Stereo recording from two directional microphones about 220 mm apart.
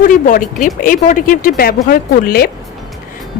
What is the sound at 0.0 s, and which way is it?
A woman's voice, 35° left (ahead or behind).